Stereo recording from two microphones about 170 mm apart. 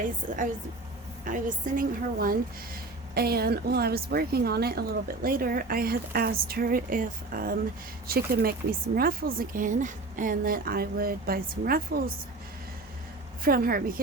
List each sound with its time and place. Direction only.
0.3 s a woman's voice: 50° right (ahead or behind)
13.4 s a woman's voice: 60° right (ahead or behind)